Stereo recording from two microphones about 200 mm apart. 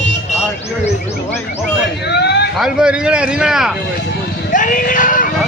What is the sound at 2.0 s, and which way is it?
Speech, 55° left (ahead or behind).